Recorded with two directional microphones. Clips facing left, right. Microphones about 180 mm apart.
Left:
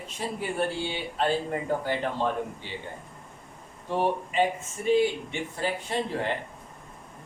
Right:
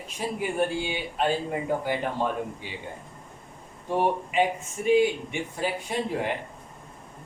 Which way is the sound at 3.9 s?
15° right (ahead or behind).